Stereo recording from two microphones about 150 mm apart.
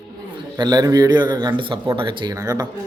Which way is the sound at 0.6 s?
25° right (ahead or behind).